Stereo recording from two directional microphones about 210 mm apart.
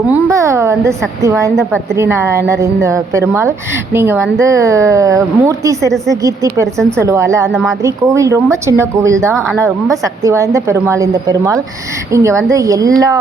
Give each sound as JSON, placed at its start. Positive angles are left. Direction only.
{"t": 0.1, "sound": "a woman's voice", "side_deg": -15}
{"t": 9.3, "sound": "speech", "side_deg": 5}
{"t": 9.6, "sound": "a woman's voice", "side_deg": -15}